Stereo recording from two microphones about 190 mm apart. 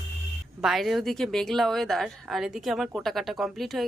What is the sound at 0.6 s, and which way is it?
Speech, centre (ahead or behind).